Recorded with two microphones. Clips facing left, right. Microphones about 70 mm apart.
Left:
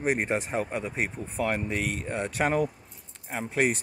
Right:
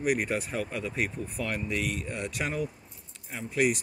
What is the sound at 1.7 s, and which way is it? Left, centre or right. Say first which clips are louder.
Speech: left 1 dB; left.